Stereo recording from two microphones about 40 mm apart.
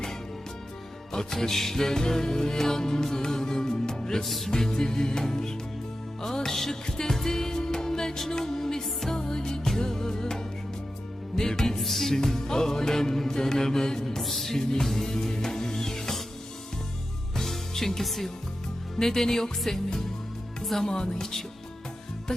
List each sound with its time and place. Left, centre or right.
1.1 s music: centre
4.3 s music: centre
4.5 s music: centre
11.8 s music: centre
14.2 s music: centre
14.5 s music: centre
17.3 s music: centre
20.7 s speech: centre
20.9 s music: centre